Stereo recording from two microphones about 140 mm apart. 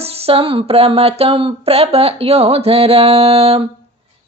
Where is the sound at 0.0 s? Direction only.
45° right (ahead or behind).